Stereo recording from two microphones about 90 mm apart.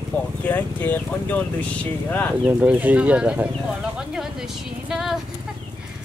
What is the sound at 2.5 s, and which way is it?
Speech, 20° right (ahead or behind).